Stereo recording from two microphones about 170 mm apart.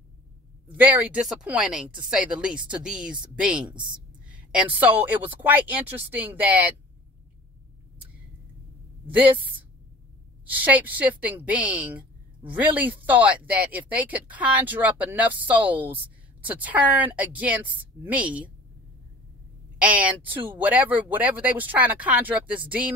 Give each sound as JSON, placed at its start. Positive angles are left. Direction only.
{"t": 0.7, "sound": "speech", "side_deg": -10}
{"t": 3.7, "sound": "a woman's voice", "side_deg": -25}
{"t": 4.3, "sound": "speech", "side_deg": -5}
{"t": 9.1, "sound": "speech", "side_deg": -10}
{"t": 19.8, "sound": "speech", "side_deg": -10}